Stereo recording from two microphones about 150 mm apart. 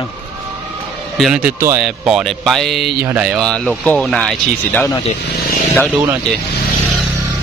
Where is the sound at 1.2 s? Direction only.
5° right (ahead or behind).